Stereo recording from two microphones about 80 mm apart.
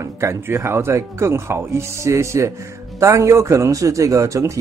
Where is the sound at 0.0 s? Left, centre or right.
Right.